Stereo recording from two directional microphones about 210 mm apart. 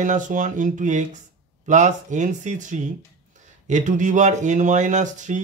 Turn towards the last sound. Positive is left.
turn(degrees=-35)  # may be behind; listen again after turning